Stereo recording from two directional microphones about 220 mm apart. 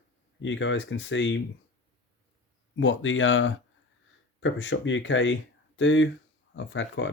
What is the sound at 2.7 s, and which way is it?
Speech, 60° left (ahead or behind).